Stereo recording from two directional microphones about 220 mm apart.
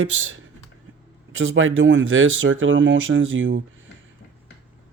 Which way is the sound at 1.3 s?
65° right (ahead or behind).